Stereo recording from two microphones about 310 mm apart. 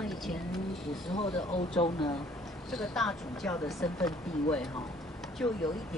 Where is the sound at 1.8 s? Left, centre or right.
Centre.